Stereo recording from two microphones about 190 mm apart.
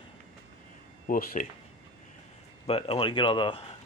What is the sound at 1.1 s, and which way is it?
Speech, 45° left (ahead or behind).